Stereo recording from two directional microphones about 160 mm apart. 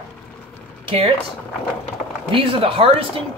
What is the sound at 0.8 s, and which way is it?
Speech, 35° right (ahead or behind).